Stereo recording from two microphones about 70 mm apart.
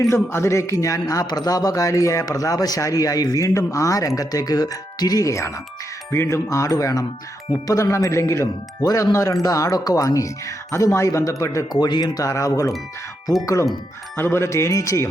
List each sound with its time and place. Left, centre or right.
0.1 s speech: left
11.7 s speech: left
12.2 s speech: left
14.2 s speech: left